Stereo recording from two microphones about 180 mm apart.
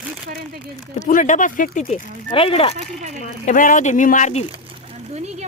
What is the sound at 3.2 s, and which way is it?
Speech, 45° left (ahead or behind).